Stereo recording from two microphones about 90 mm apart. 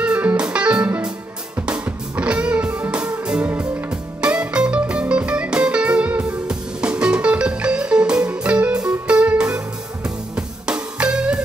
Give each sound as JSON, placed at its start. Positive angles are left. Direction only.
{"t": 0.0, "sound": "music", "side_deg": -15}